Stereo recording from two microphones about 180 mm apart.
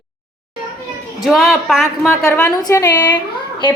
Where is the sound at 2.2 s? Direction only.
20° left (ahead or behind).